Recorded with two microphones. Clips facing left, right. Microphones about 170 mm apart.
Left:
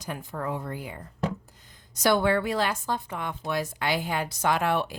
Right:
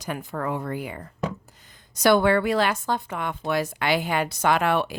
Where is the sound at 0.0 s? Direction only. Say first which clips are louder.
Right 4 dB; 75° right (ahead or behind).